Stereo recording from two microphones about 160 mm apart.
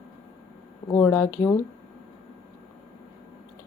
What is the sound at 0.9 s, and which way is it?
Speech, 15° left (ahead or behind).